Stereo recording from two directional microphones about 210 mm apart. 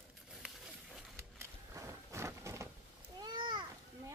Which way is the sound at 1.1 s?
15° right (ahead or behind).